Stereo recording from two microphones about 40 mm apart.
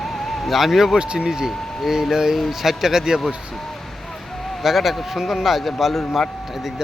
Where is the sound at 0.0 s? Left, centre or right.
Centre.